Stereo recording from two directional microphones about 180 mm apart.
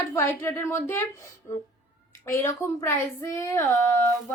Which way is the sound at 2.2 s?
15° left (ahead or behind).